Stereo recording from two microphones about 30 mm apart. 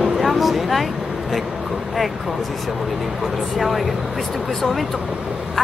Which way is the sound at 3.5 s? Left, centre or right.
Centre.